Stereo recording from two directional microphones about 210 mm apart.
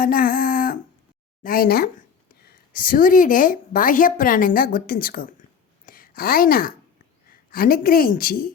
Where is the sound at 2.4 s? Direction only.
45° left (ahead or behind).